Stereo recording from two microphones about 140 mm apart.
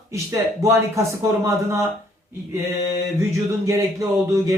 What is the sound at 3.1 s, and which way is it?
Speech, 20° right (ahead or behind).